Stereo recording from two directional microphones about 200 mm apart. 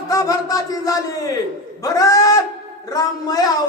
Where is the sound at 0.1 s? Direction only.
20° left (ahead or behind).